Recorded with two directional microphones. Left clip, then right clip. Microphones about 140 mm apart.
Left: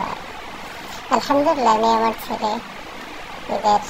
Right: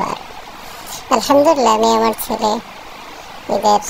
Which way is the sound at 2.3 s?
75° right (ahead or behind).